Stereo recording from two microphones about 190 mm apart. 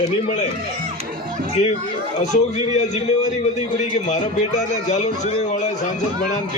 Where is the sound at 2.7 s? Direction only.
35° left (ahead or behind).